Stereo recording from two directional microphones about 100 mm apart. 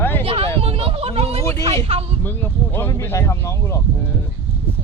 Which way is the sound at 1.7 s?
80° right.